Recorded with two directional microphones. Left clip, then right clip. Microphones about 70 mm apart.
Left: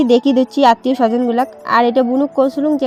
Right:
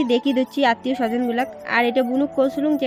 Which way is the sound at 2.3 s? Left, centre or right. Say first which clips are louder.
Left 4 dB; left.